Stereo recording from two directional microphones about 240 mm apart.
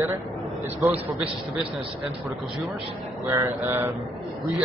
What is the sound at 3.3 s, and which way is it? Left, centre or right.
Speech, centre.